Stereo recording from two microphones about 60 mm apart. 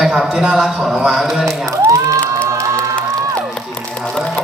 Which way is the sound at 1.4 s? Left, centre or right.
Right.